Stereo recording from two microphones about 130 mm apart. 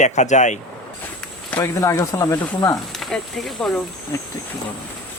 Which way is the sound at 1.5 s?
20° left (ahead or behind).